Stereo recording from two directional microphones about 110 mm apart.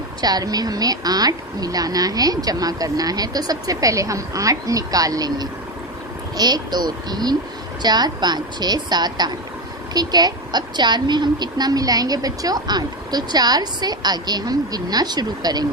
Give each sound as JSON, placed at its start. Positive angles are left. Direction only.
{"t": 0.2, "sound": "a woman's voice", "side_deg": -35}